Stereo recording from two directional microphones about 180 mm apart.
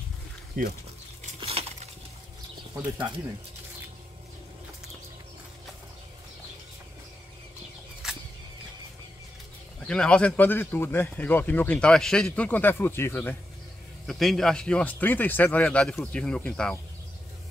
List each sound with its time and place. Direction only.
1.4 s coin: 35° right (ahead or behind)
2.7 s speech: 5° right (ahead or behind)
8.0 s a sound: 5° right (ahead or behind)
9.8 s speech: 5° left (ahead or behind)
14.0 s speech: centre (ahead or behind)